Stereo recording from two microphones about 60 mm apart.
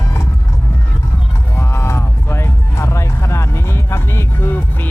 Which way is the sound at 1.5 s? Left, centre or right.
Left.